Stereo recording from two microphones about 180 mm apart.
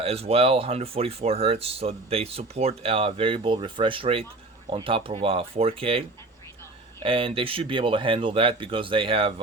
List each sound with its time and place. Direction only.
0.0 s speech: 35° right (ahead or behind)